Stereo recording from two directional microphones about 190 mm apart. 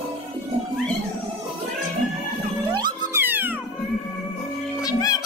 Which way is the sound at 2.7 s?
25° right (ahead or behind).